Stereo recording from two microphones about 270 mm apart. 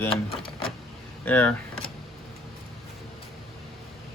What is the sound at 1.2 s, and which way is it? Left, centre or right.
Speech, centre.